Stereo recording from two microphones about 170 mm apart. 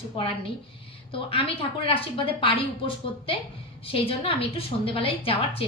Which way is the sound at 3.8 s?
35° left (ahead or behind).